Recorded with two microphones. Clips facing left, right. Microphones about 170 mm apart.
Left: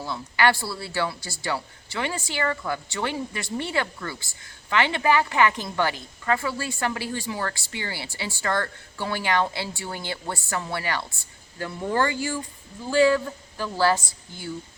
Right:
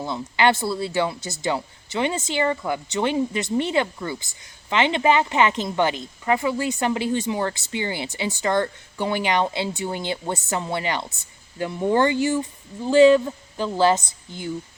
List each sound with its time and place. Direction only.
0.0 s speech: 20° right (ahead or behind)